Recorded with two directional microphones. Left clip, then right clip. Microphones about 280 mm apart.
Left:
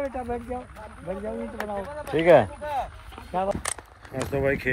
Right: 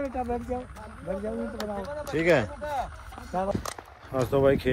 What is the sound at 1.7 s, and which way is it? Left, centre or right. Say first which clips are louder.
Speech: left 5 dB; left.